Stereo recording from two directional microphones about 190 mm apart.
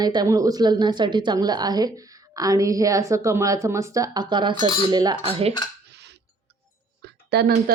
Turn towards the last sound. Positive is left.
turn(degrees=-55)  # may be behind; listen again after turning